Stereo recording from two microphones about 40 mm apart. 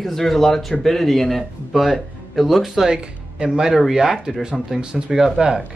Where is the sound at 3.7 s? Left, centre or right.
Centre.